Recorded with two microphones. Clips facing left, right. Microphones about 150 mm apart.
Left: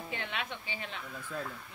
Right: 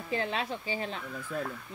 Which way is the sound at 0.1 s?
35° right (ahead or behind).